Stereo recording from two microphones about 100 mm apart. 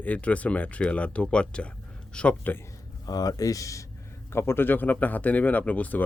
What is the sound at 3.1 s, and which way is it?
Speech, 40° left (ahead or behind).